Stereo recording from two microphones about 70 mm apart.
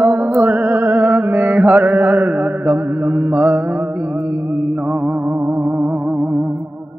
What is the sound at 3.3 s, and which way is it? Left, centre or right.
Mantra, right.